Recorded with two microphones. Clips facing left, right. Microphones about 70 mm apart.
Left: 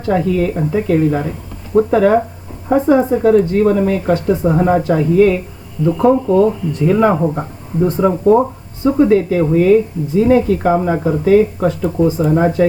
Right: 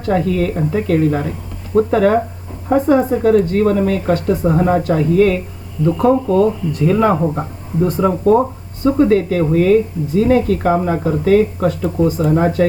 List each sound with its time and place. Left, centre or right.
0.1 s speech: centre
2.7 s a woman's voice: centre
3.6 s speech: centre